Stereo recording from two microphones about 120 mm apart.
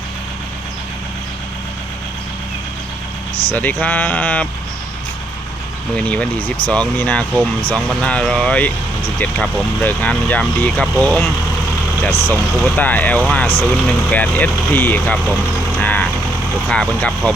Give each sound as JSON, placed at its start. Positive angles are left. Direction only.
{"t": 3.5, "sound": "speech", "side_deg": 15}
{"t": 6.0, "sound": "speech", "side_deg": 10}
{"t": 15.8, "sound": "vehicle", "side_deg": 10}
{"t": 16.6, "sound": "speech", "side_deg": 5}